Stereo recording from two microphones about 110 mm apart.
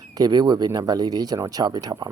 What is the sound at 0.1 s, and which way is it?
Speech, 35° right (ahead or behind).